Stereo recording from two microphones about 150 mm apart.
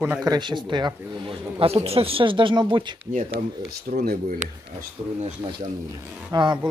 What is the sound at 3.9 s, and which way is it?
Speech, 75° right (ahead or behind).